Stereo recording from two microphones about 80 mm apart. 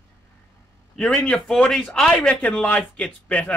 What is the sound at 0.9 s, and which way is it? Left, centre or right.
Speech, centre.